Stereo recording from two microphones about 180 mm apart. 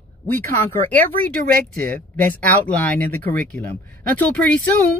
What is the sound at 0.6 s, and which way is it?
Speech, 10° left (ahead or behind).